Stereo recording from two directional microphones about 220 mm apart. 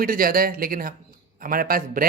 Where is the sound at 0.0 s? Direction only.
40° right (ahead or behind).